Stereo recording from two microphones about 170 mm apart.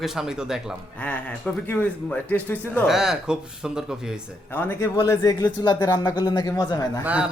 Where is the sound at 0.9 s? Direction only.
10° left (ahead or behind).